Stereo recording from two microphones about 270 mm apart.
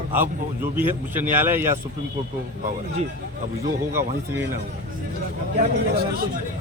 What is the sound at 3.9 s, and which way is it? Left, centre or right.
Speech, centre.